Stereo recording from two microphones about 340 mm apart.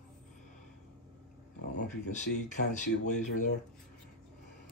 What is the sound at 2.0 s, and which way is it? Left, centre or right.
Speech, left.